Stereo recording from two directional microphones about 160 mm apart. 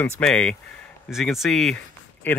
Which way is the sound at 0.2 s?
5° left (ahead or behind).